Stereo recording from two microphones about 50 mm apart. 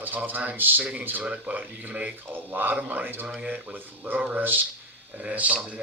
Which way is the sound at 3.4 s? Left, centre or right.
Right.